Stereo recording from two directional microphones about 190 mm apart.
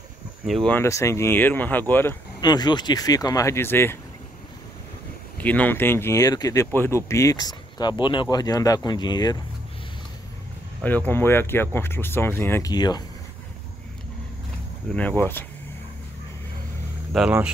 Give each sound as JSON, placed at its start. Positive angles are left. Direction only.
{"t": 0.7, "sound": "speech", "side_deg": 15}
{"t": 2.4, "sound": "speech", "side_deg": 20}
{"t": 5.4, "sound": "speech", "side_deg": 10}
{"t": 10.8, "sound": "speech", "side_deg": 10}
{"t": 15.0, "sound": "speech", "side_deg": 10}
{"t": 17.1, "sound": "speech", "side_deg": -5}